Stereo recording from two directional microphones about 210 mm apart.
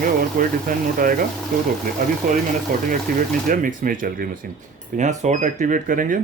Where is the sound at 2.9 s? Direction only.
40° right (ahead or behind).